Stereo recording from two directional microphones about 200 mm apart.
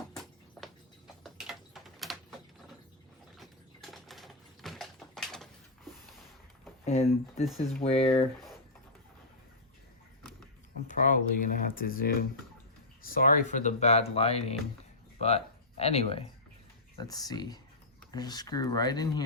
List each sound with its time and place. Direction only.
0.6 s a sound: centre (ahead or behind)
3.3 s typing: centre (ahead or behind)
6.8 s speech: 30° left (ahead or behind)
10.8 s speech: 40° left (ahead or behind)
15.8 s speech: 30° left (ahead or behind)
17.0 s speech: 20° left (ahead or behind)